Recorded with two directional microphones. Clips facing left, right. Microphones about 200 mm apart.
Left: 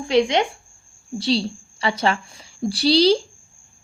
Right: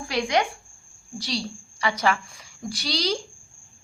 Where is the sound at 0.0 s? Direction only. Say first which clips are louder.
Left 6 dB; 20° left (ahead or behind).